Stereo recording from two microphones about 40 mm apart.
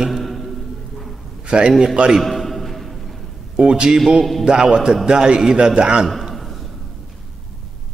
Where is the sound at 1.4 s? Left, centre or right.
Right.